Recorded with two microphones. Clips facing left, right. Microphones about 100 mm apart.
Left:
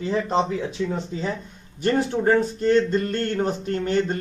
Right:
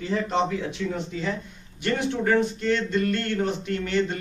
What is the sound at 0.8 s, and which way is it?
Speech, 25° left (ahead or behind).